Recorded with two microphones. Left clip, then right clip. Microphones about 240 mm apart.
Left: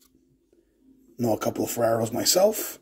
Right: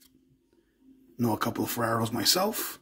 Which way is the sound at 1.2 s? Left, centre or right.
Right.